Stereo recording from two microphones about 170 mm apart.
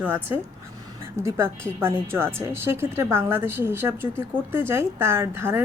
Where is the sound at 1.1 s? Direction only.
15° right (ahead or behind).